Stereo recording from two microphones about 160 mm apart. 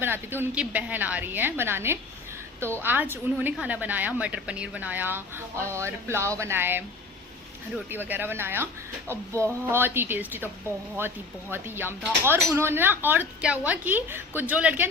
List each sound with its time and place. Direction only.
0.0 s speech: 15° right (ahead or behind)
7.9 s speech: 10° right (ahead or behind)